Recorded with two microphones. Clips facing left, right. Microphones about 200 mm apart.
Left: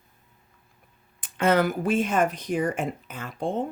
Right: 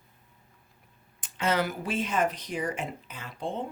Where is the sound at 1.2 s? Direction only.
55° left (ahead or behind).